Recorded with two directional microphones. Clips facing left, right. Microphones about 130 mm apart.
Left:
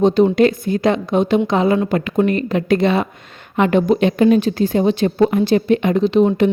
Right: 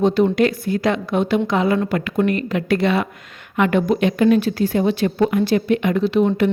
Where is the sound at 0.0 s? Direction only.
20° left (ahead or behind).